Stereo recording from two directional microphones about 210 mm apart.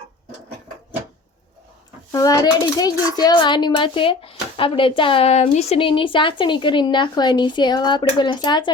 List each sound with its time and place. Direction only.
2.1 s a child's voice: 20° left (ahead or behind)